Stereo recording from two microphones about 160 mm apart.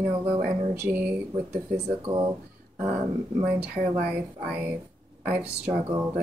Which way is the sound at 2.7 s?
60° right (ahead or behind).